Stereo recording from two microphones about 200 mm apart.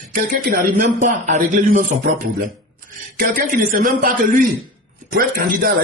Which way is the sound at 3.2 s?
45° right (ahead or behind).